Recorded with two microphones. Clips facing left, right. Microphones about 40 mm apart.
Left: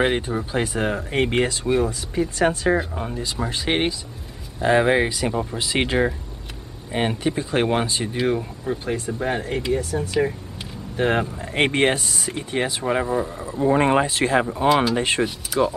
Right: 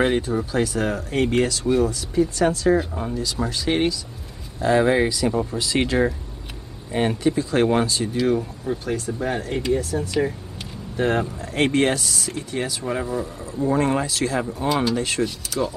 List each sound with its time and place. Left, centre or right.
0.0 s speech: left
2.8 s speech: centre
3.4 s speech: left
9.5 s speech: centre
11.0 s speech: left
15.2 s speech: centre